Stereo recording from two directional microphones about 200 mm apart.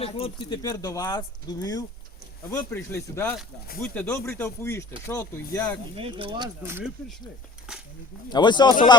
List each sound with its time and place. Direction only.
0.0 s speech: 25° left (ahead or behind)
6.0 s speech: 25° right (ahead or behind)
7.7 s a sound: 5° right (ahead or behind)
8.3 s speech: 20° left (ahead or behind)